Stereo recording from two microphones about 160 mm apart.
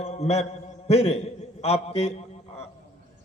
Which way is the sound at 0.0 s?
40° left (ahead or behind).